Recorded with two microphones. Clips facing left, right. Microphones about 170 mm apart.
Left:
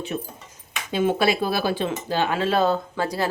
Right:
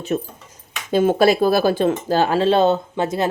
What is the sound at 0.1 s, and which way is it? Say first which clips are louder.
Speech: right 7 dB; 45° right (ahead or behind).